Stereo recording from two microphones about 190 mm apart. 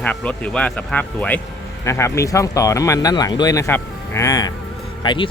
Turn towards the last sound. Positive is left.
turn(degrees=25)  # may be behind; listen again after turning